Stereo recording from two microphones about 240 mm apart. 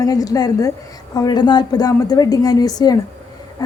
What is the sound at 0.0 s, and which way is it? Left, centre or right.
A woman's voice, centre.